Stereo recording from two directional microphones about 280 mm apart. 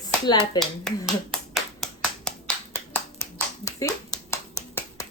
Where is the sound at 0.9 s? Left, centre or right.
Centre.